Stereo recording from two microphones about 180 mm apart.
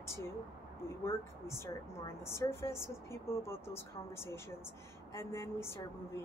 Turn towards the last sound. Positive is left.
turn(degrees=15)  # may be behind; listen again after turning